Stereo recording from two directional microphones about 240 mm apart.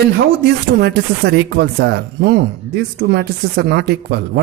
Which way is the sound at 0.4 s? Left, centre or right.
Right.